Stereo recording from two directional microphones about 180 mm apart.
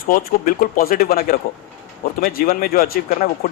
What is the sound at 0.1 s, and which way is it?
A man's voice, 55° left (ahead or behind).